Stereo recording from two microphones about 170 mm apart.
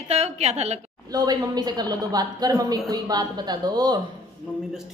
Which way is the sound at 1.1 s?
25° right (ahead or behind).